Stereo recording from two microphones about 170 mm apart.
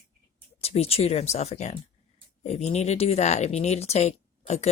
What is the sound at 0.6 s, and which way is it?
Speech, 35° left (ahead or behind).